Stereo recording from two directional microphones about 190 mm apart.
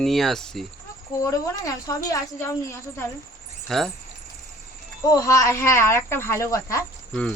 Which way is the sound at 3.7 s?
Centre (ahead or behind).